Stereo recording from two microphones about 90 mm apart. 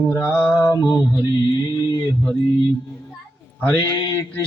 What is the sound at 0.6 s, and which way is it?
Mantra, 40° left (ahead or behind).